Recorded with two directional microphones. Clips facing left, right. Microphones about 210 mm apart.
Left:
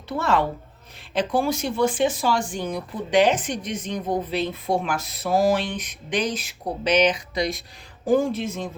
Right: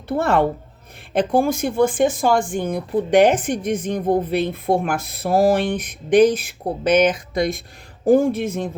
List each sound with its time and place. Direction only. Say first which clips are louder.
0.1 s speech: right 5 dB; 55° right (ahead or behind)